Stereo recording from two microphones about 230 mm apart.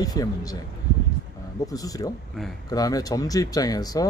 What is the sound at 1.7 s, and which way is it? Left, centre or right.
Speech, centre.